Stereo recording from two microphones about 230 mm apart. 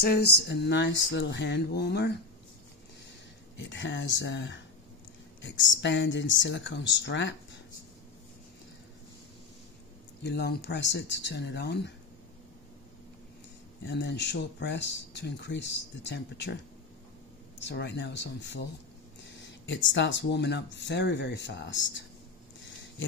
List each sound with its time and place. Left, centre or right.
0.0 s speech: left
3.5 s speech: left
10.2 s speech: left
13.8 s speech: left
17.6 s speech: left